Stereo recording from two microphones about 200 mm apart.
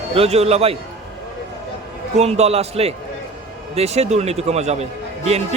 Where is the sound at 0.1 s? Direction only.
30° right (ahead or behind).